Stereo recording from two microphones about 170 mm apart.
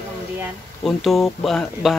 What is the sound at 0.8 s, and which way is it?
Speech, centre (ahead or behind).